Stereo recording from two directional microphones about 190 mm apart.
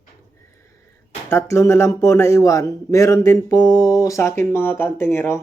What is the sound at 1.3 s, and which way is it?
A man's voice, 15° left (ahead or behind).